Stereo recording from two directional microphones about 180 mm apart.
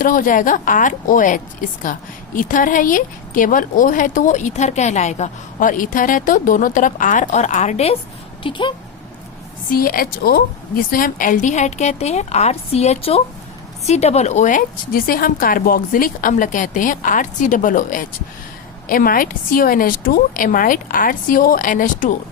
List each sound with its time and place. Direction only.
0.0 s a woman's voice: 50° left (ahead or behind)
8.4 s speech: 25° left (ahead or behind)
9.6 s a woman's voice: 55° left (ahead or behind)